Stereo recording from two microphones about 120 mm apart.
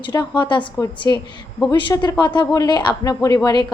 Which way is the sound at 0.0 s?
40° left (ahead or behind).